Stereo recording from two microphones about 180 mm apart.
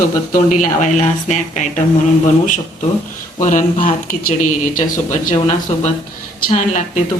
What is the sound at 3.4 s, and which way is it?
Speech, 45° left (ahead or behind).